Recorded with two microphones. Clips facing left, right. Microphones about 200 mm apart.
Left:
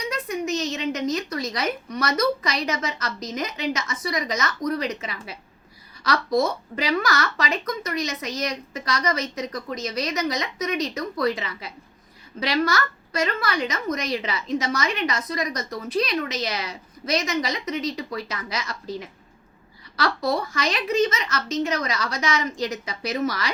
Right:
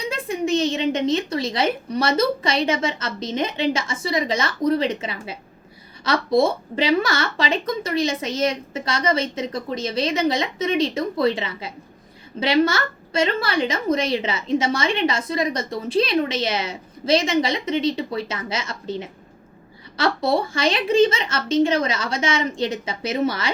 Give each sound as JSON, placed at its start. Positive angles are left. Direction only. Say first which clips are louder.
{"t": 0.0, "sound": "a woman's voice", "louder": "right 3 dB", "side_deg": -30}